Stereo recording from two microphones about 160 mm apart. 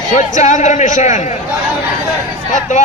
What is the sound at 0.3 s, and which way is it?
Speech, 50° left (ahead or behind).